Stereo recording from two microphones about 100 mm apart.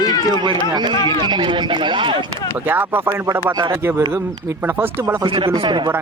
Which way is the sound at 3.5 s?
50° right (ahead or behind).